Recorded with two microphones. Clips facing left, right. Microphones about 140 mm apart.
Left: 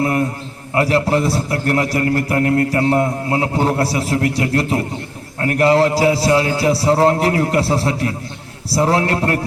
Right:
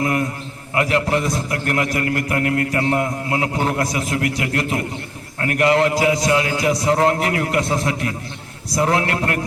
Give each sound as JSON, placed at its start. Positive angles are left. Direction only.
{"t": 0.0, "sound": "a man's voice", "side_deg": 35}